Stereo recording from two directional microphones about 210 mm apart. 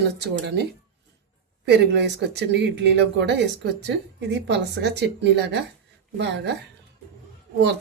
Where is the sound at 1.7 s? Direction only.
55° right (ahead or behind).